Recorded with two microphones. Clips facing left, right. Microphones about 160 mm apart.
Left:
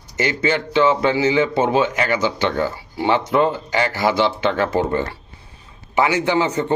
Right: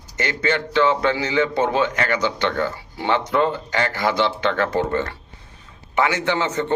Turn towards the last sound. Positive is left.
turn(degrees=10)  # may be behind; listen again after turning